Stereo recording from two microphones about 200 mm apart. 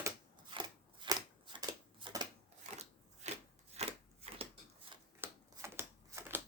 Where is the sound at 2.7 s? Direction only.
35° right (ahead or behind).